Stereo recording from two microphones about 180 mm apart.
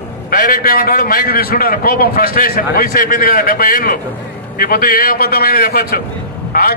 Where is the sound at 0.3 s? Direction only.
55° left (ahead or behind).